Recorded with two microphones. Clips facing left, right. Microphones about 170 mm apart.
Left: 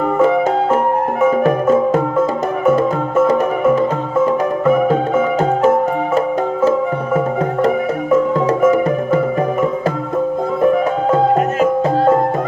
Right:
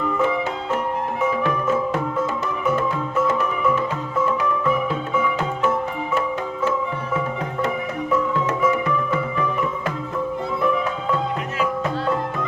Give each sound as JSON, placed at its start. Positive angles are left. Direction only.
{"t": 0.2, "sound": "music", "side_deg": 45}